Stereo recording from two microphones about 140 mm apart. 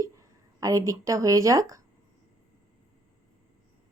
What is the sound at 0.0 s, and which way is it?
A woman's voice, 25° right (ahead or behind).